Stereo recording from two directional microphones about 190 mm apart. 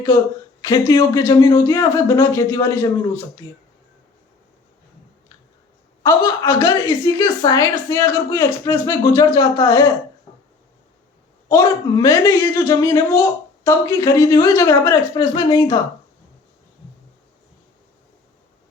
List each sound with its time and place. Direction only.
0.6 s a woman's voice: 20° left (ahead or behind)
6.0 s a woman's voice: 15° left (ahead or behind)
11.4 s a woman's voice: 15° left (ahead or behind)